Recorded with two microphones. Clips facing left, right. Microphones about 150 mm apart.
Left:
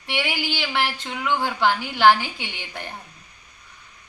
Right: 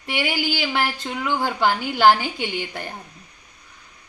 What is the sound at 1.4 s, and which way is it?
Speech, 45° right (ahead or behind).